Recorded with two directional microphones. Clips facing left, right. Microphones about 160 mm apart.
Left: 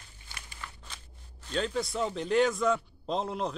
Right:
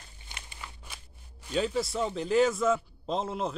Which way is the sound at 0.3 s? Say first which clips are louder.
Even; 20° right (ahead or behind).